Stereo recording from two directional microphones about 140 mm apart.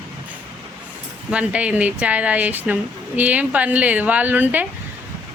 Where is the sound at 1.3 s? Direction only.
10° right (ahead or behind).